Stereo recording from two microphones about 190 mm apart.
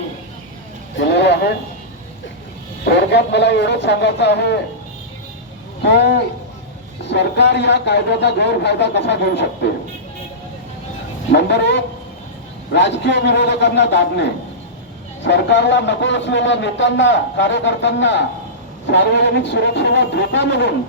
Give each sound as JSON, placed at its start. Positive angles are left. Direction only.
{"t": 0.9, "sound": "a sound", "side_deg": 65}
{"t": 2.8, "sound": "speech", "side_deg": 65}
{"t": 5.8, "sound": "speech", "side_deg": 65}
{"t": 11.3, "sound": "speech", "side_deg": 65}